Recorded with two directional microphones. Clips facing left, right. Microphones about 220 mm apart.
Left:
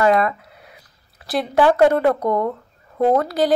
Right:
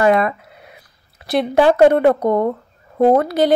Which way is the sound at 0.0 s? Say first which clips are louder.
Right 2 dB; 20° right (ahead or behind).